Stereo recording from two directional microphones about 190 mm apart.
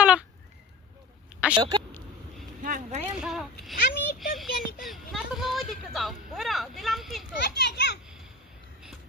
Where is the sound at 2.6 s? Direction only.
45° right (ahead or behind).